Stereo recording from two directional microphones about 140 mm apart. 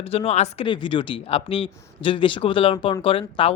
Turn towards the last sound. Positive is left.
turn(degrees=40)  # may be behind; listen again after turning